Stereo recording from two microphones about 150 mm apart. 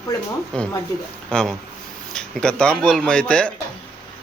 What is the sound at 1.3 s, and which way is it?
Speech, 5° left (ahead or behind).